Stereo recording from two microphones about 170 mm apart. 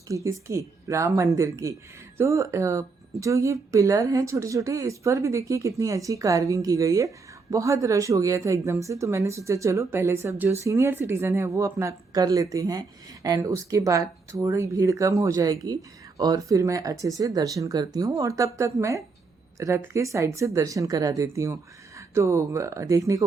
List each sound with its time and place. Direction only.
0.1 s speech: 20° right (ahead or behind)